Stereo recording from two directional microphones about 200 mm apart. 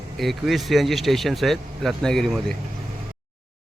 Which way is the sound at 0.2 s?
Centre (ahead or behind).